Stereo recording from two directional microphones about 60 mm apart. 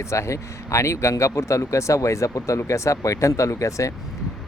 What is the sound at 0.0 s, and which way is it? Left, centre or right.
Speech, left.